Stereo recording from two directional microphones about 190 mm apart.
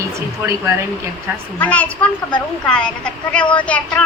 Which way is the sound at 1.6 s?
5° left (ahead or behind).